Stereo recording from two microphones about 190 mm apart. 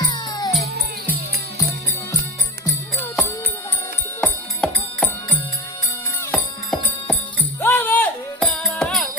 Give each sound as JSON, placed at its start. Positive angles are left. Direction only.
{"t": 0.1, "sound": "music", "side_deg": 20}
{"t": 2.6, "sound": "music", "side_deg": 10}